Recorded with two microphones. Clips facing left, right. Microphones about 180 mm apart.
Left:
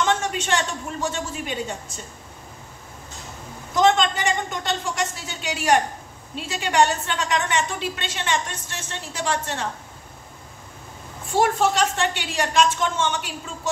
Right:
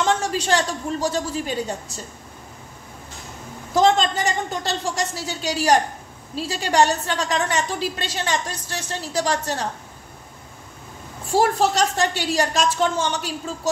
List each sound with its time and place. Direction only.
0.0 s a woman's voice: 35° right (ahead or behind)
3.7 s a woman's voice: 35° right (ahead or behind)
11.3 s a woman's voice: 35° right (ahead or behind)